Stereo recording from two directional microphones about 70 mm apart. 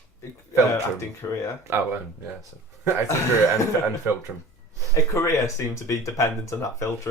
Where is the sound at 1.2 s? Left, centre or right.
Left.